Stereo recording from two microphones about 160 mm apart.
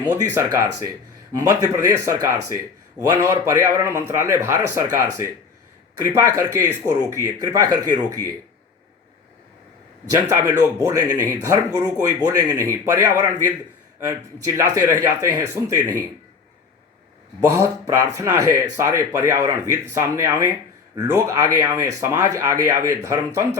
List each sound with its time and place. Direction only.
0.3 s speech: 20° right (ahead or behind)
10.1 s speech: 15° right (ahead or behind)
17.5 s speech: 20° right (ahead or behind)